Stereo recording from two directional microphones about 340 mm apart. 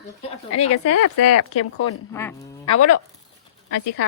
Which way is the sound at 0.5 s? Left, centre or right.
Left.